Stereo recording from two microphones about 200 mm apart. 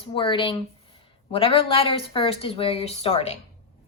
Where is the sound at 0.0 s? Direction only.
25° left (ahead or behind).